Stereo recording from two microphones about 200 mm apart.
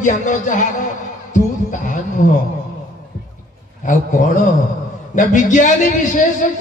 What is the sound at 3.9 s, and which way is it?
A man's voice, 40° left (ahead or behind).